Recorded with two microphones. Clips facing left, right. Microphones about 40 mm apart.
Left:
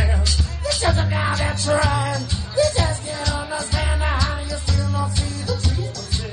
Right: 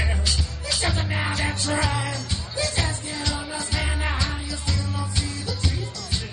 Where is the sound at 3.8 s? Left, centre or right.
Centre.